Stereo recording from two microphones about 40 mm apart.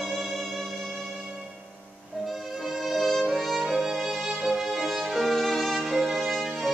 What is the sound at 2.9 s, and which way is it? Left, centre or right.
Music, centre.